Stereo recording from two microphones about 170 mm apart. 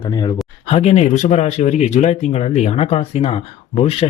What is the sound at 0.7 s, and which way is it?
Speech, 40° left (ahead or behind).